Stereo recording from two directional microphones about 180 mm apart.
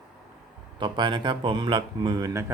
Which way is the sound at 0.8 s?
25° right (ahead or behind).